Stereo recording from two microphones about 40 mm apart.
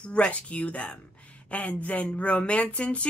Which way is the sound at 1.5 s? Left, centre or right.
Left.